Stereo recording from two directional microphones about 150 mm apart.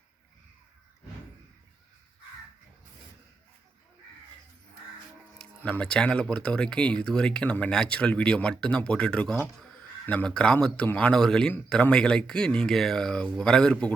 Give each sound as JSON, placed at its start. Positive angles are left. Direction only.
{"t": 5.4, "sound": "speech", "side_deg": 10}